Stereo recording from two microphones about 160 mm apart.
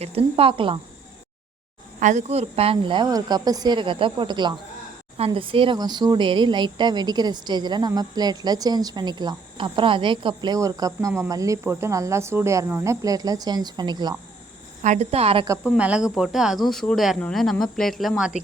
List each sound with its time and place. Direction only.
0.0 s speech: 40° right (ahead or behind)
2.0 s speech: 50° right (ahead or behind); by 14.2 s 25° right (ahead or behind)
14.8 s speech: 40° right (ahead or behind)
15.6 s speech: 5° right (ahead or behind)